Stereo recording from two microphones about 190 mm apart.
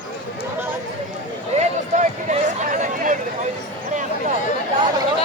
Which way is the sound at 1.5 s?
35° right (ahead or behind).